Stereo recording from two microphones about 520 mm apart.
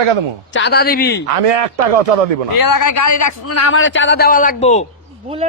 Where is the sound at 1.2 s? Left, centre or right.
Right.